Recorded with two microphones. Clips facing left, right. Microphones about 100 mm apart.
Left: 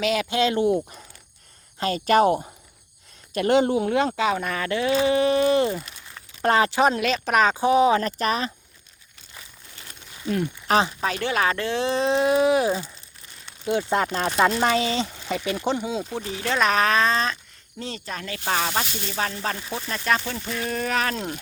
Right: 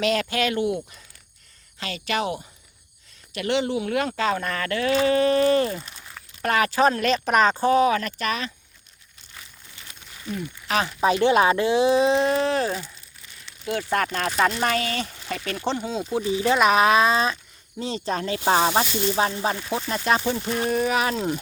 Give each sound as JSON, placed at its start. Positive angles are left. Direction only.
{"t": 0.0, "sound": "speech", "side_deg": 5}
{"t": 0.3, "sound": "speech", "side_deg": 25}
{"t": 1.8, "sound": "speech", "side_deg": 40}
{"t": 3.8, "sound": "speech", "side_deg": 25}
{"t": 4.2, "sound": "speech", "side_deg": 10}
{"t": 7.0, "sound": "speech", "side_deg": 0}
{"t": 10.2, "sound": "speech", "side_deg": 75}
{"t": 11.0, "sound": "speech", "side_deg": -20}
{"t": 16.4, "sound": "speech", "side_deg": -15}